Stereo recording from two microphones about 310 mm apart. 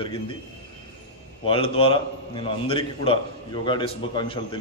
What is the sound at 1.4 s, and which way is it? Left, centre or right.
A man's voice, centre.